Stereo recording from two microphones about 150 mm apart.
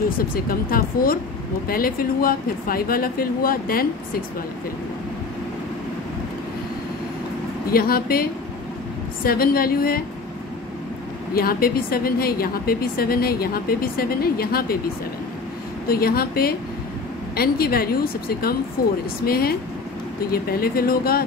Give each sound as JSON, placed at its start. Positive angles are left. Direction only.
{"t": 0.2, "sound": "speech", "side_deg": 75}
{"t": 7.7, "sound": "a woman's voice", "side_deg": 80}
{"t": 11.3, "sound": "a woman's voice", "side_deg": 80}
{"t": 15.9, "sound": "a woman's voice", "side_deg": 85}